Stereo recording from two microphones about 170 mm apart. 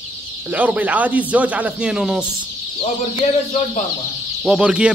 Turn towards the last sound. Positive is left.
turn(degrees=-5)  # may be behind; listen again after turning